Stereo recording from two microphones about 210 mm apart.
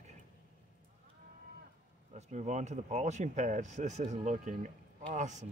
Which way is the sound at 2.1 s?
35° right (ahead or behind).